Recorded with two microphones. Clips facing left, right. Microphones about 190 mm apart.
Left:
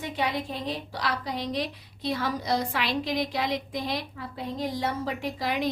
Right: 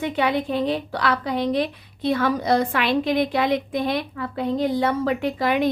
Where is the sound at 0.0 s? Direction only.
65° right (ahead or behind).